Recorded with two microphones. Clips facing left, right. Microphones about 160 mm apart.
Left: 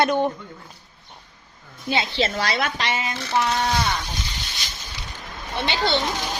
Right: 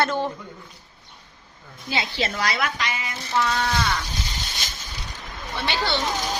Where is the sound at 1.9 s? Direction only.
25° left (ahead or behind).